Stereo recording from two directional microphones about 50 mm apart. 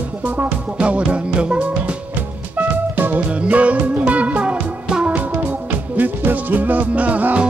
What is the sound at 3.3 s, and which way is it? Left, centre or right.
Music, right.